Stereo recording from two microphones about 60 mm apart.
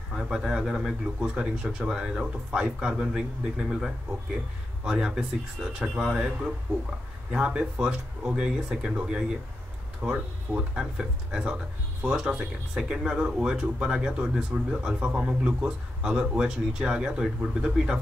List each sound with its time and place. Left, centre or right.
0.1 s speech: centre